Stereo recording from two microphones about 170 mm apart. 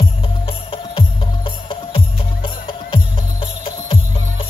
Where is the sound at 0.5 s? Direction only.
30° left (ahead or behind).